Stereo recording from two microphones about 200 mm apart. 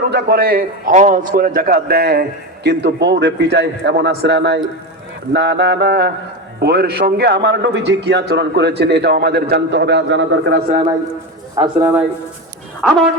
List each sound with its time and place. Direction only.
0.1 s a man's voice: 50° right (ahead or behind)
11.6 s a man's voice: 20° right (ahead or behind)
12.8 s speech: centre (ahead or behind)